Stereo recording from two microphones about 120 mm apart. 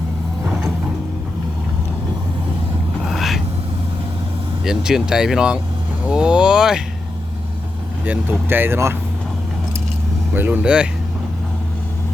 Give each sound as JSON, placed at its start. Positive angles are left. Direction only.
{"t": 3.0, "sound": "a sound", "side_deg": 0}
{"t": 4.6, "sound": "speech", "side_deg": -5}
{"t": 8.0, "sound": "speech", "side_deg": -15}
{"t": 10.3, "sound": "speech", "side_deg": -15}